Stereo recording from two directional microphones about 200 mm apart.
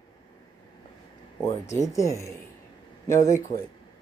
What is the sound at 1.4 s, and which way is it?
Speech, 15° left (ahead or behind).